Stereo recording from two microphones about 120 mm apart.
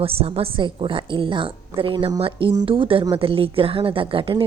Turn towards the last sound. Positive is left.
turn(degrees=-45)  # may be behind; listen again after turning